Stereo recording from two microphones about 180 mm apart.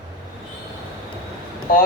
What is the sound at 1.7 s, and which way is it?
Speech, 50° left (ahead or behind).